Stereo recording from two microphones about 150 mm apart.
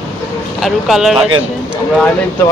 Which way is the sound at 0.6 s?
Centre (ahead or behind).